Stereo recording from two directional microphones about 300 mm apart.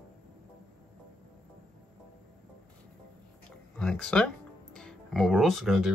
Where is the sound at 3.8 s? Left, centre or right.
Centre.